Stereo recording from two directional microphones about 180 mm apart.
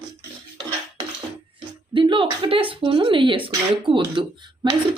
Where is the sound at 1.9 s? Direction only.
25° right (ahead or behind).